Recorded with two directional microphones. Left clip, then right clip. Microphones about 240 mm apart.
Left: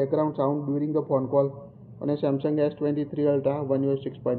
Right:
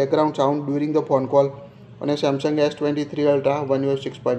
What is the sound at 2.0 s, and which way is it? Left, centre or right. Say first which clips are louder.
Speech: right 5 dB; centre.